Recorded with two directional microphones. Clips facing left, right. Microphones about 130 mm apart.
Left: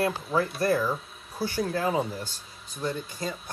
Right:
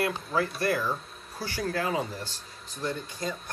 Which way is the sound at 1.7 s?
20° left (ahead or behind).